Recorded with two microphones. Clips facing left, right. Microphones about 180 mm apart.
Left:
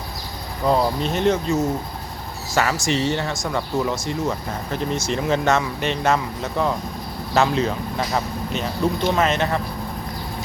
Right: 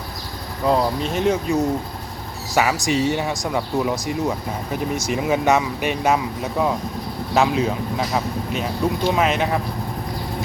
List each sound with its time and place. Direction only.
0.6 s speech: centre (ahead or behind)